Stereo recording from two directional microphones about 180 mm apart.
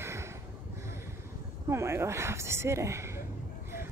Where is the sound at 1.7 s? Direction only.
15° right (ahead or behind).